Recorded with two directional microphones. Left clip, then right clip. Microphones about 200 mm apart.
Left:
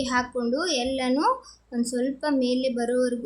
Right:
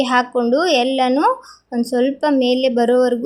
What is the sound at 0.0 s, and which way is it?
Speech, 30° right (ahead or behind).